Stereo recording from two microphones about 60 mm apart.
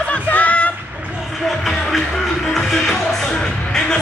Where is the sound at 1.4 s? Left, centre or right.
Centre.